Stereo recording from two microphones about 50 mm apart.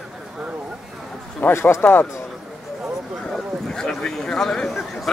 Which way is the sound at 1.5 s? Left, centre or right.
Left.